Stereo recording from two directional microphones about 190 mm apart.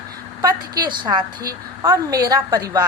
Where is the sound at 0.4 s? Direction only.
20° right (ahead or behind).